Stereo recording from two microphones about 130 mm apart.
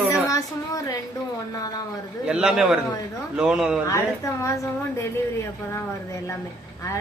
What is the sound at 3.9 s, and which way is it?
Speech, 25° left (ahead or behind).